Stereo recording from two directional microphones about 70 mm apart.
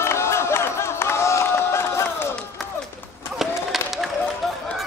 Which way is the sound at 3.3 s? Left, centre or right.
Centre.